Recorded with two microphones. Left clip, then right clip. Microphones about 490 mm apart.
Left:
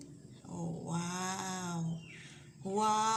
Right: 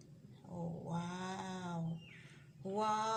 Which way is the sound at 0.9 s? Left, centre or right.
Right.